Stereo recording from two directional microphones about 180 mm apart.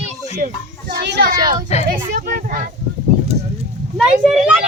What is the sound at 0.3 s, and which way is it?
Speech, 45° right (ahead or behind).